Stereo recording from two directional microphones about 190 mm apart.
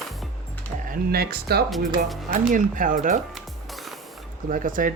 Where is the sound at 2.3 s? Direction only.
45° right (ahead or behind).